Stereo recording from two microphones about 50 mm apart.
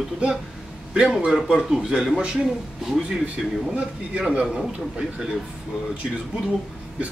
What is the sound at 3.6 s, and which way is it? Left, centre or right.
Speech, right.